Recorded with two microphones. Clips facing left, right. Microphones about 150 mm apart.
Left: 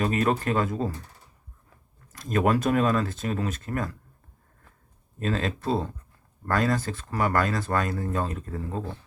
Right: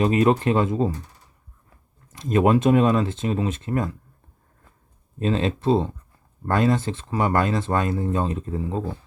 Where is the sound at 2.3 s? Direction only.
25° right (ahead or behind).